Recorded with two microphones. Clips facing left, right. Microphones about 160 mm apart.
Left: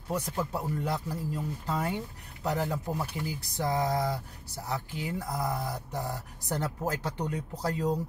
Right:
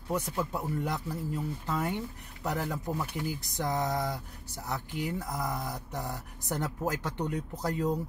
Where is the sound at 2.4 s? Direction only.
30° left (ahead or behind).